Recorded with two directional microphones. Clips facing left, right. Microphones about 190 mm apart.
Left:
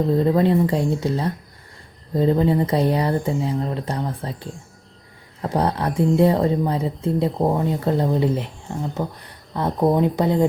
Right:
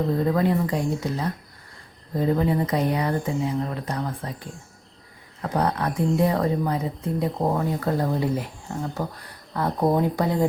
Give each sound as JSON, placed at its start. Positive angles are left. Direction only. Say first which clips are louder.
{"t": 0.3, "sound": "speech", "louder": "left 4 dB", "side_deg": 25}
{"t": 9.8, "sound": "speech", "louder": "left 4 dB", "side_deg": 20}